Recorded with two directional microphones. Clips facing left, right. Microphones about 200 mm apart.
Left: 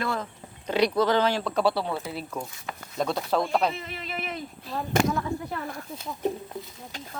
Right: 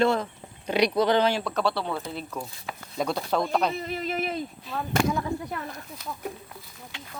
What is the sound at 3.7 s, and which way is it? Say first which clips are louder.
Speech: right 6 dB; 40° right (ahead or behind).